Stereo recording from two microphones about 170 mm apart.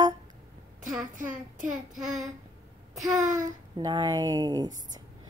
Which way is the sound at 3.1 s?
20° right (ahead or behind).